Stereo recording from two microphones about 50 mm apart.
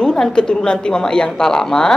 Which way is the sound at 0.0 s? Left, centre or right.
Centre.